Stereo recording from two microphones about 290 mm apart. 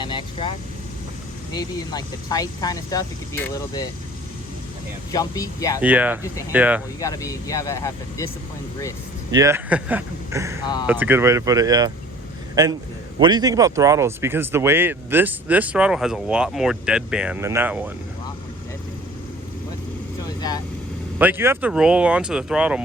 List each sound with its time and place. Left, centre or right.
0.0 s vehicle: centre
1.5 s speech: centre
5.1 s speech: centre
5.8 s speech: centre
7.0 s speech: centre
9.3 s speech: centre
13.1 s speech: centre
21.2 s speech: centre